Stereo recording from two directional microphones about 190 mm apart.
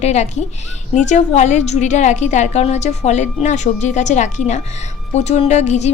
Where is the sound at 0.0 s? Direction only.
35° left (ahead or behind).